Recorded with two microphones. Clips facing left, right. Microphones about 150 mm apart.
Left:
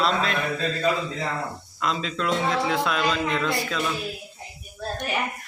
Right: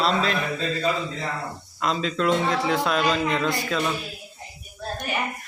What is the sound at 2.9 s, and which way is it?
Speech, 40° right (ahead or behind).